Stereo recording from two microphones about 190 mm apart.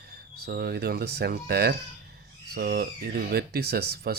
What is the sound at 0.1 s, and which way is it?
Speech, 55° right (ahead or behind).